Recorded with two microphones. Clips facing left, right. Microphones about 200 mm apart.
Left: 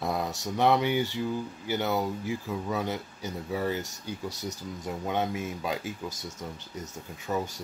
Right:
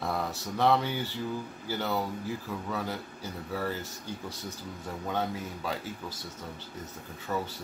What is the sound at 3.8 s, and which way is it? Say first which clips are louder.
Speech: left 2 dB; 75° left (ahead or behind).